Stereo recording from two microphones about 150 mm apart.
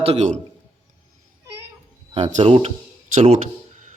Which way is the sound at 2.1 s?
45° right (ahead or behind).